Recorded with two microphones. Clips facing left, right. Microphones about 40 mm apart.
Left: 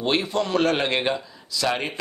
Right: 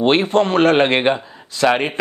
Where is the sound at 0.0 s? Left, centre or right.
Right.